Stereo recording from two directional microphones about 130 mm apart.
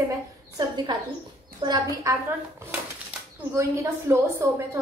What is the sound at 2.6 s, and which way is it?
A woman's voice, 20° right (ahead or behind).